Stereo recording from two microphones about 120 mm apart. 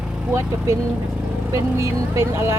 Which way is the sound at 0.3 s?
25° right (ahead or behind).